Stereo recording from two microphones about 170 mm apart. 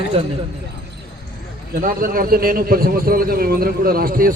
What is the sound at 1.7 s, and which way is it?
A man's voice, 55° right (ahead or behind).